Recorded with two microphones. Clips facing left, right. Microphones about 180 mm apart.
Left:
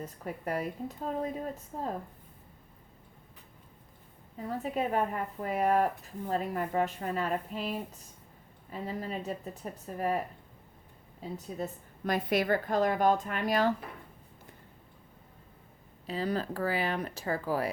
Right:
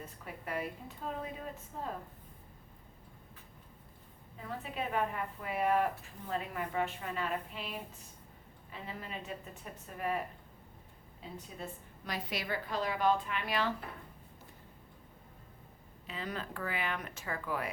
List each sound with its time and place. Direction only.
0.0 s a woman's voice: 40° left (ahead or behind)
4.4 s a woman's voice: 40° left (ahead or behind)
11.2 s a woman's voice: 40° left (ahead or behind)
16.0 s a woman's voice: 35° left (ahead or behind)